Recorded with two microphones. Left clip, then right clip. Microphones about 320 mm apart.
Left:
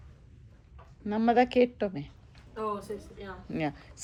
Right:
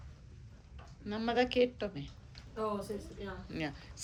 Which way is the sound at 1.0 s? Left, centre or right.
Centre.